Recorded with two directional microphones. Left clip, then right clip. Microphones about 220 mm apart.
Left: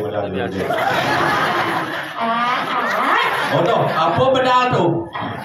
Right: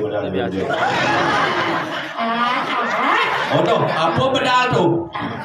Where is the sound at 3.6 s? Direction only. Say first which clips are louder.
Left 1 dB; 40° right (ahead or behind).